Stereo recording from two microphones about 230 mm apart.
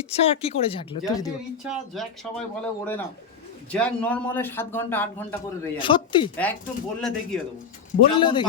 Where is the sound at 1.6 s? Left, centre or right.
Centre.